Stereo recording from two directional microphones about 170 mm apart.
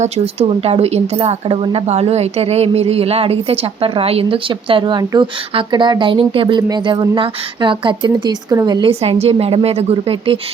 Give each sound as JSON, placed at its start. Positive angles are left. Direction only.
{"t": 0.0, "sound": "speech", "side_deg": -35}